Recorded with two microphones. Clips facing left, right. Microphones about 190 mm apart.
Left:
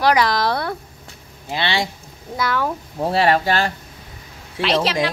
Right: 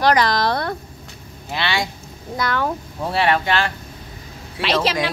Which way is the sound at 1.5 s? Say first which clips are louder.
Left 1 dB; 30° left (ahead or behind).